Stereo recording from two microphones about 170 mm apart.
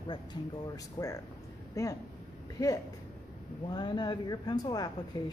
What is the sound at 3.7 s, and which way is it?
Speech, 25° left (ahead or behind).